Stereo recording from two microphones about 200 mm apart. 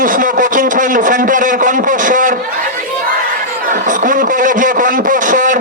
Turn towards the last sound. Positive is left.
turn(degrees=-40)  # may be behind; listen again after turning